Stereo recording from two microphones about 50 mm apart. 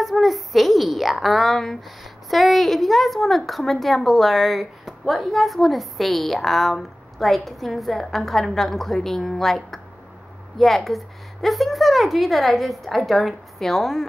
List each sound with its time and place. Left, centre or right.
0.0 s a woman's voice: centre